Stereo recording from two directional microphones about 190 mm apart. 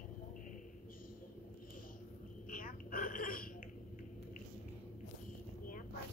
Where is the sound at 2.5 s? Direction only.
45° left (ahead or behind).